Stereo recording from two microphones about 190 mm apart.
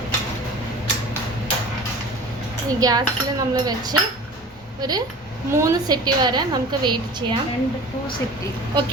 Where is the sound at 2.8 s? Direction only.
20° right (ahead or behind).